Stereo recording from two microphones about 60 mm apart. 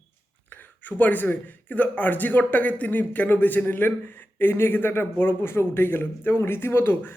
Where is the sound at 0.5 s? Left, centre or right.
Left.